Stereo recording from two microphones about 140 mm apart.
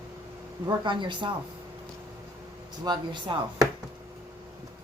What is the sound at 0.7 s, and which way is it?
Speech, 35° right (ahead or behind).